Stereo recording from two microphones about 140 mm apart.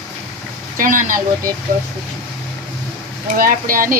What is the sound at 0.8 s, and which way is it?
Speech, 70° right (ahead or behind).